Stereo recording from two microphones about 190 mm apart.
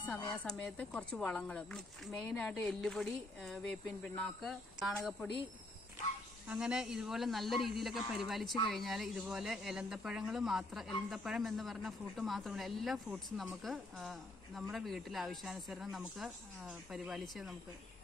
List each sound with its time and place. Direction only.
0.5 s speech: centre (ahead or behind)
6.4 s speech: 5° right (ahead or behind)